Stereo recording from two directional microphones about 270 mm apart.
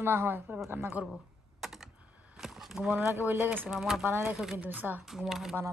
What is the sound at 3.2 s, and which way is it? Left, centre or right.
Speech, centre.